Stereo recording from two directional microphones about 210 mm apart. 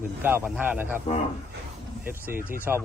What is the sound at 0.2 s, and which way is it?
Speech, 10° right (ahead or behind).